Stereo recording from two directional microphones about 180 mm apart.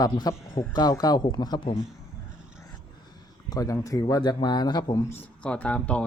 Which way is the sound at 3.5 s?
20° left (ahead or behind).